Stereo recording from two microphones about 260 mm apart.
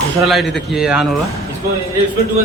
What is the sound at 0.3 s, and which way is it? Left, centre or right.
Speech, centre.